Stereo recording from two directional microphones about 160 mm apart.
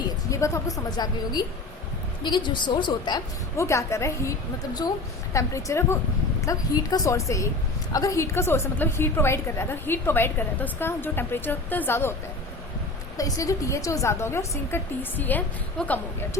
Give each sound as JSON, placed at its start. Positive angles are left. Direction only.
{"t": 0.3, "sound": "a woman's voice", "side_deg": 20}
{"t": 3.6, "sound": "a woman's voice", "side_deg": 20}
{"t": 13.1, "sound": "a woman's voice", "side_deg": 20}